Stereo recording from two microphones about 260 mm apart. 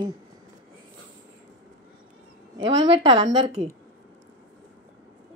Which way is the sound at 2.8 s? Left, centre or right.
Centre.